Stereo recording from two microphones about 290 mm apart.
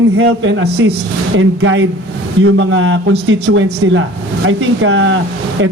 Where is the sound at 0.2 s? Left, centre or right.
Right.